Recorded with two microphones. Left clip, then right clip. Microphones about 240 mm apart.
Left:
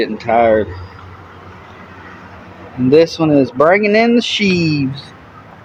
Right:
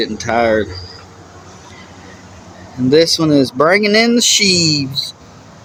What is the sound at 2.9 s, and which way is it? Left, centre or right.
Speech, centre.